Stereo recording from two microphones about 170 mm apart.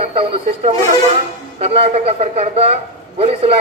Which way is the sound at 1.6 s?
35° right (ahead or behind).